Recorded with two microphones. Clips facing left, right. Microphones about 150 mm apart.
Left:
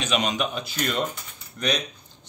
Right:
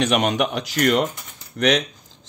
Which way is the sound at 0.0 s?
60° right (ahead or behind).